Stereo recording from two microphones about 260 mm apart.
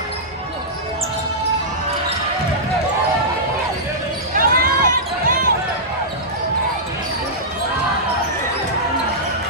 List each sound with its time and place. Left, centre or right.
4.4 s basketball bounce: right